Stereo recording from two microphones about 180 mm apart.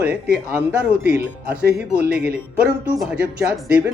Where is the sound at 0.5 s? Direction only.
10° right (ahead or behind).